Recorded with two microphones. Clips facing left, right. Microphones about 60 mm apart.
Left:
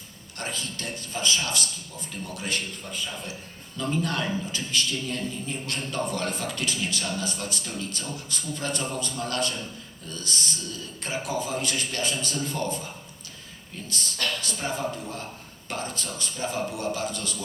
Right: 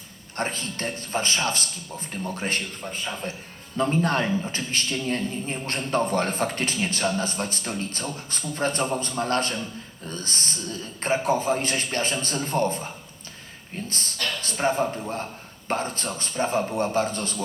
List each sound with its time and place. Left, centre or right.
0.3 s a man's voice: right